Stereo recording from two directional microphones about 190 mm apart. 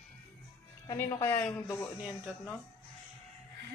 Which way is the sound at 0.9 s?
15° left (ahead or behind).